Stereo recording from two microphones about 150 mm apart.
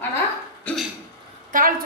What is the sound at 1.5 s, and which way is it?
Speech, 65° right (ahead or behind).